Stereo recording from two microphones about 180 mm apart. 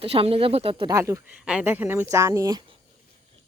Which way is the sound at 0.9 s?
20° right (ahead or behind).